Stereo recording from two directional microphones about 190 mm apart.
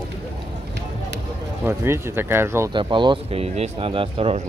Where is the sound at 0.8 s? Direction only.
65° right (ahead or behind).